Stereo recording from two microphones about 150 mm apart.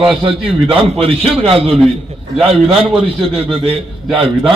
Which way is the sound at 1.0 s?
40° right (ahead or behind).